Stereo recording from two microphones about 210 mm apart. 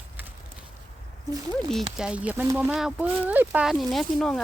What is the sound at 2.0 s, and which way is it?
Speech, 5° right (ahead or behind).